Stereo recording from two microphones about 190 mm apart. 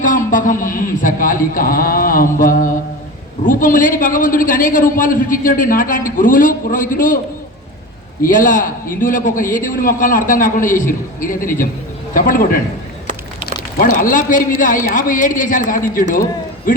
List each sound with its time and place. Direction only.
0.0 s a man's voice: 45° left (ahead or behind)
8.2 s a man's voice: 45° left (ahead or behind)
13.7 s a man's voice: 45° left (ahead or behind)